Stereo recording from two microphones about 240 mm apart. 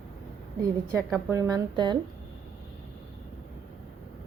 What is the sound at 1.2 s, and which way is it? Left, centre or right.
Speech, centre.